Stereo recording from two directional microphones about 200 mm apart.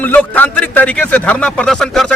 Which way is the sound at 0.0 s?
10° left (ahead or behind).